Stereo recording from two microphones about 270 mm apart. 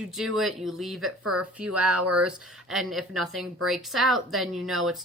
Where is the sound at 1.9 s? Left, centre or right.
Right.